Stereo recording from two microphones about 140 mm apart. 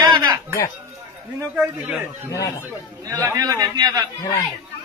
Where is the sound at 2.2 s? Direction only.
25° left (ahead or behind).